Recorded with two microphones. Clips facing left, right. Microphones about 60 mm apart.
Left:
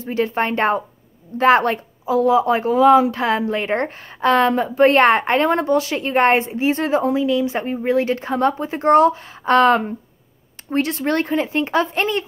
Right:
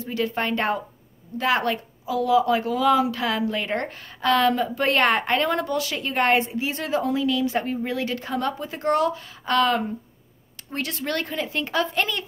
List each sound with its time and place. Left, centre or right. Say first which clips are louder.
0.0 s a woman's voice: left 5 dB; left